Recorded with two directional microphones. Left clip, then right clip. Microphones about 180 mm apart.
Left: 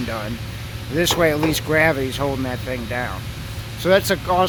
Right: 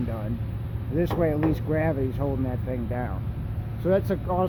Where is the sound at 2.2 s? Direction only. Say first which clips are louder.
Left 8 dB; 30° left (ahead or behind).